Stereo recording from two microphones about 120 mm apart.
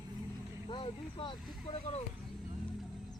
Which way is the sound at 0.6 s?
45° left (ahead or behind).